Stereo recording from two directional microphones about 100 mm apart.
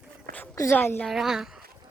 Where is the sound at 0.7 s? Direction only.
20° left (ahead or behind).